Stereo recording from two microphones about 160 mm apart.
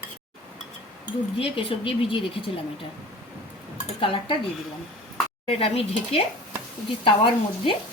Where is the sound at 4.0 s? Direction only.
35° left (ahead or behind).